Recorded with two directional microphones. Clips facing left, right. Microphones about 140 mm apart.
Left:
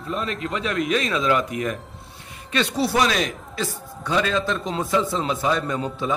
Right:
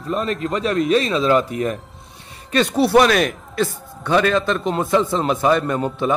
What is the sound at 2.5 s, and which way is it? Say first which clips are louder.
Speech: right 6 dB; 45° right (ahead or behind).